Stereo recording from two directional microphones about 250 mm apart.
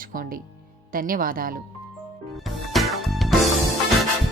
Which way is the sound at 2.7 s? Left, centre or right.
Centre.